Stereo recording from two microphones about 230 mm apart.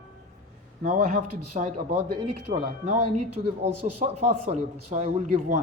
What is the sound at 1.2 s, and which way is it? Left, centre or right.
Speech, right.